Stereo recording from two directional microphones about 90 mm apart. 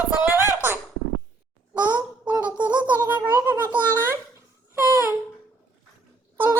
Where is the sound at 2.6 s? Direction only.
55° right (ahead or behind).